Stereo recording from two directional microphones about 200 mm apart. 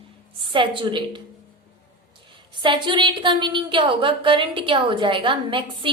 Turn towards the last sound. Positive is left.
turn(degrees=-25)  # may be behind; listen again after turning